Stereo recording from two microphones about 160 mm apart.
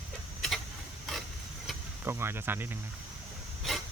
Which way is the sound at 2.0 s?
15° right (ahead or behind).